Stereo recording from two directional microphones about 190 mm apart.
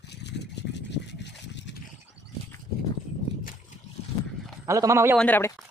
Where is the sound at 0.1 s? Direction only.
65° left (ahead or behind).